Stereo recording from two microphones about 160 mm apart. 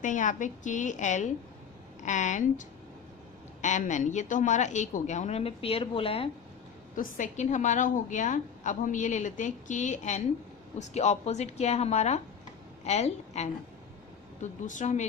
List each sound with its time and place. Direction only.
0.0 s a woman's voice: 55° left (ahead or behind); by 6.3 s 35° left (ahead or behind)
6.9 s a woman's voice: 55° left (ahead or behind)
14.7 s a woman's voice: 50° left (ahead or behind)